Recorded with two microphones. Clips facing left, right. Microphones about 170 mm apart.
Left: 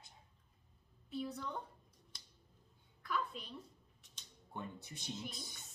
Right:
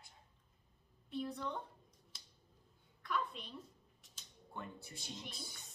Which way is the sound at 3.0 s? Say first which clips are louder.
Even; centre (ahead or behind).